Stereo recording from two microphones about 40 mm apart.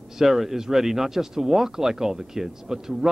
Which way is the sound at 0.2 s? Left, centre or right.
Centre.